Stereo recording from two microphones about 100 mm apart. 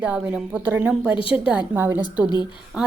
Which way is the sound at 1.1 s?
65° left (ahead or behind).